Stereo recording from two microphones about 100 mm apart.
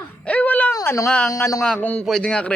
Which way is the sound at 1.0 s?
5° left (ahead or behind).